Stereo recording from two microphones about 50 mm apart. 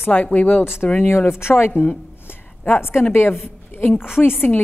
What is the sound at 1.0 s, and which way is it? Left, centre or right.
Speech, left.